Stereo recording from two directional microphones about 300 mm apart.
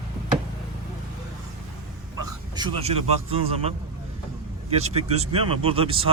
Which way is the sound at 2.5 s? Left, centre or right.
Centre.